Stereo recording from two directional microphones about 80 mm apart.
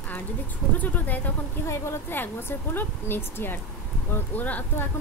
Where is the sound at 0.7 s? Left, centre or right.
Left.